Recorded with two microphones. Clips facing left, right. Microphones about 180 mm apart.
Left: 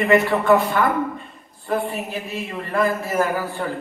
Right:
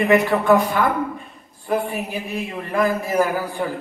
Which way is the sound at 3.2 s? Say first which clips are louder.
Right 1 dB; centre (ahead or behind).